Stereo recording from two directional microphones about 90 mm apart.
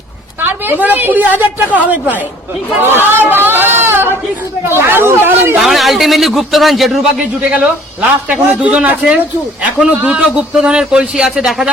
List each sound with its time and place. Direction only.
0.4 s a woman's voice: 20° right (ahead or behind)
3.1 s a sound: 25° right (ahead or behind)
4.7 s a woman's voice: 25° right (ahead or behind)
5.5 s speech: centre (ahead or behind)
8.3 s speech: 15° right (ahead or behind)